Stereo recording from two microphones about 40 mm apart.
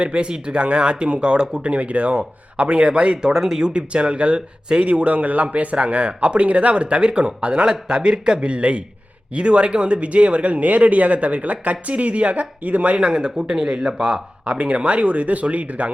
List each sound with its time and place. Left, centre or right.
0.0 s speech: right
3.3 s speech: centre
3.6 s speech: right
4.9 s speech: right
8.4 s speech: right
13.0 s speech: right